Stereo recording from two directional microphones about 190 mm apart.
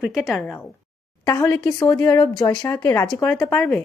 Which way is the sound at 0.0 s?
5° right (ahead or behind).